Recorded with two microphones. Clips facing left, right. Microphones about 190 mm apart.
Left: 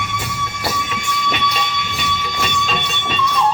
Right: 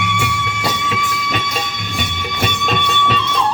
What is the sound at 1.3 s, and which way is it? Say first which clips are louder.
Music: left 1 dB; 50° right (ahead or behind).